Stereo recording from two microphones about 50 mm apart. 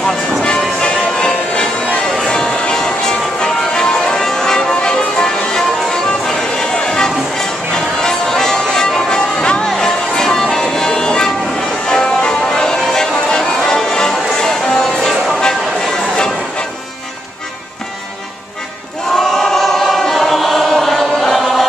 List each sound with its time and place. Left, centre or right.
0.0 s music: centre
15.4 s a sound: centre
19.1 s choir: centre